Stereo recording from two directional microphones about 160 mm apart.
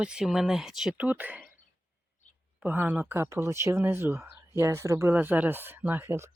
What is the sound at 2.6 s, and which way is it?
Speech, 10° right (ahead or behind).